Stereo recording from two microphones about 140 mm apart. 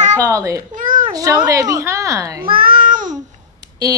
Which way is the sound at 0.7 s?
70° right (ahead or behind).